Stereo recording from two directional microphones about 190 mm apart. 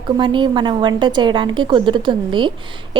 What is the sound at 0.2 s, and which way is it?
A woman's voice, 25° right (ahead or behind).